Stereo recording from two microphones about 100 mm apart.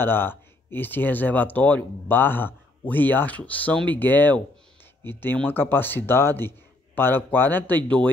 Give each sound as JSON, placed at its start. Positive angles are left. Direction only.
{"t": 0.0, "sound": "speech", "side_deg": 20}